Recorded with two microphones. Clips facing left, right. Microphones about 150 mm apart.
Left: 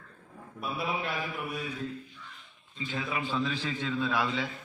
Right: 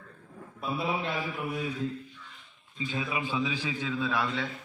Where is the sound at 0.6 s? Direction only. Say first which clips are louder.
Right 2 dB; 25° right (ahead or behind).